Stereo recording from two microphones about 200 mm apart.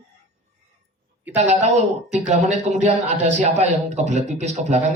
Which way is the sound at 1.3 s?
35° right (ahead or behind).